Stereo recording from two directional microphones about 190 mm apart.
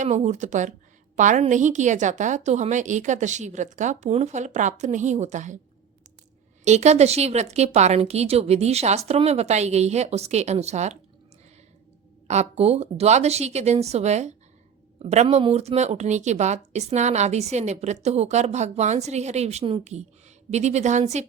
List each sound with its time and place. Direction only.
0.0 s speech: 40° right (ahead or behind)
6.7 s speech: 35° right (ahead or behind)
12.3 s speech: 35° right (ahead or behind)